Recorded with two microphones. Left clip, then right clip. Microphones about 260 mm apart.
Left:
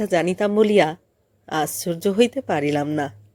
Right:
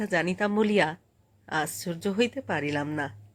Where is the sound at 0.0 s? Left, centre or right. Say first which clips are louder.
Left 7 dB; centre.